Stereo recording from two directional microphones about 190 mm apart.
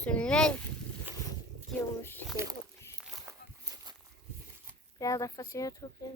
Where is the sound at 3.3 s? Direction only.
15° right (ahead or behind).